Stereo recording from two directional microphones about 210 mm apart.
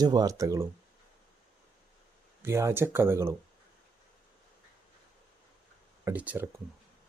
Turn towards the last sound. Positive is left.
turn(degrees=-10)  # may be behind; listen again after turning